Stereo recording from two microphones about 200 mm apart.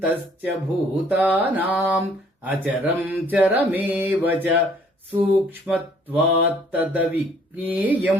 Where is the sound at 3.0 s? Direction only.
10° right (ahead or behind).